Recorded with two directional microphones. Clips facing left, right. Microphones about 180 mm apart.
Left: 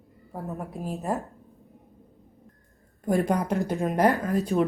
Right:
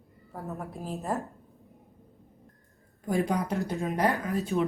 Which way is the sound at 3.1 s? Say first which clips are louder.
Left 3 dB; 50° left (ahead or behind).